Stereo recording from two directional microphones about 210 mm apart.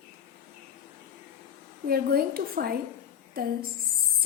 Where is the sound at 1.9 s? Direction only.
45° right (ahead or behind).